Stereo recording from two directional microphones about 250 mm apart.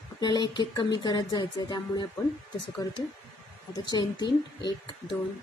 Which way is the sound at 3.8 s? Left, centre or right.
Centre.